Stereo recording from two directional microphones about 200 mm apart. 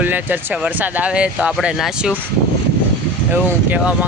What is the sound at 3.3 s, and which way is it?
Speech, 5° right (ahead or behind).